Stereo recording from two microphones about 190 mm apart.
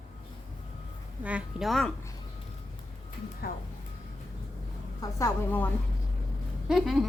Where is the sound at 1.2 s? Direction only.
5° right (ahead or behind).